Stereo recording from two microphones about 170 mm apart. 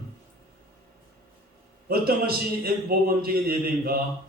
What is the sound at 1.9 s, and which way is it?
Speech, 65° right (ahead or behind).